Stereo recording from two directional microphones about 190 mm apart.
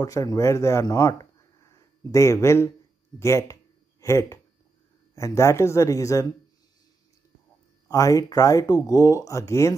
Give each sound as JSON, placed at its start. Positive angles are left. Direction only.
{"t": 0.0, "sound": "speech", "side_deg": 20}
{"t": 7.9, "sound": "speech", "side_deg": 20}